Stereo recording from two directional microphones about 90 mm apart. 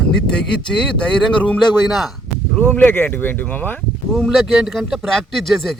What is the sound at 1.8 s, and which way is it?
Speech, centre (ahead or behind).